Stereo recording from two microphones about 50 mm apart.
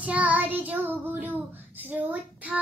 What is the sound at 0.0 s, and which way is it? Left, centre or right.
Child singing, right.